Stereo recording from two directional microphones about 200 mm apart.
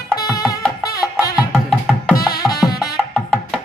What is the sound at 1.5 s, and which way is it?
Music, centre (ahead or behind).